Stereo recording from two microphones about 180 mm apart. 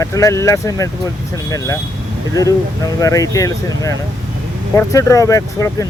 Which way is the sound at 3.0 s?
20° left (ahead or behind).